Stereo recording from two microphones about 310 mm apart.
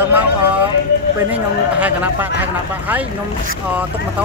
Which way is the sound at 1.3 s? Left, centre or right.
Centre.